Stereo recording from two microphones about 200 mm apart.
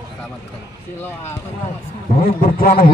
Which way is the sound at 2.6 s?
45° left (ahead or behind).